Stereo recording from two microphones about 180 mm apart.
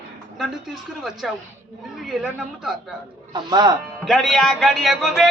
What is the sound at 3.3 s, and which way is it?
Speech, 20° right (ahead or behind).